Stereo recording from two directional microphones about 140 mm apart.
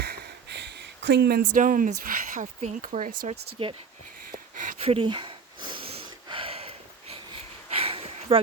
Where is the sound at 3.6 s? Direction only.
40° right (ahead or behind).